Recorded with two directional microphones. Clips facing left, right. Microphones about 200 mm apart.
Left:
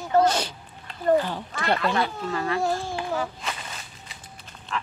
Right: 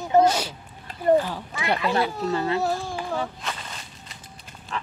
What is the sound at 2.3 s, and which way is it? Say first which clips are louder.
Speech: right 2 dB; 25° right (ahead or behind).